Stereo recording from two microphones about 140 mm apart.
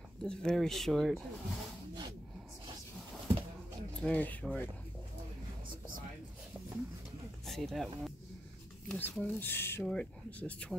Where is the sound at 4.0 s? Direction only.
10° left (ahead or behind).